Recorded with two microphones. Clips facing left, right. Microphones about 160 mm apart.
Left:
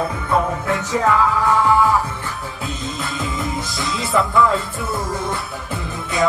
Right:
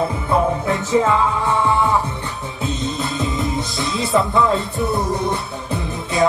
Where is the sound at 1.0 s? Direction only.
25° right (ahead or behind).